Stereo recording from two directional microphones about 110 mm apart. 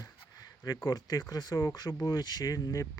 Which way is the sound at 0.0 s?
35° left (ahead or behind).